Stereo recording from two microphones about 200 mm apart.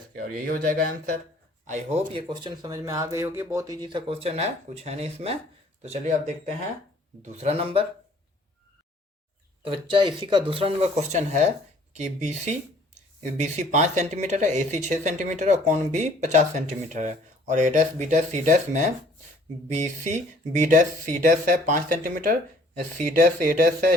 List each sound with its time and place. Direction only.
0.3 s speech: 45° right (ahead or behind); by 7.9 s 30° right (ahead or behind)
9.6 s speech: 25° right (ahead or behind); by 23.9 s 40° right (ahead or behind)